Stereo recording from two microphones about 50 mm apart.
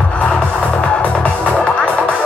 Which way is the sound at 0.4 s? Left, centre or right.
Left.